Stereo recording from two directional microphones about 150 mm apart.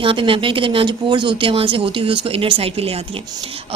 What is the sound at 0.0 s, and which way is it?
A woman's voice, 35° right (ahead or behind).